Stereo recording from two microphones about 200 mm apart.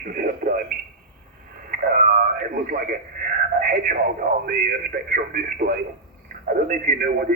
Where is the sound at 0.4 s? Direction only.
40° right (ahead or behind).